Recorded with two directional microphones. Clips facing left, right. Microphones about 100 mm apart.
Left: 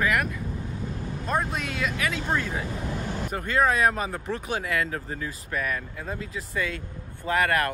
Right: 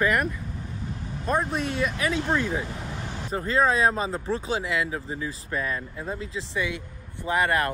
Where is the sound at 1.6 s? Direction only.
30° right (ahead or behind).